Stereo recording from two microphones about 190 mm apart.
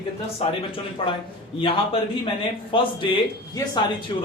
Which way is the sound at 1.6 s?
25° left (ahead or behind).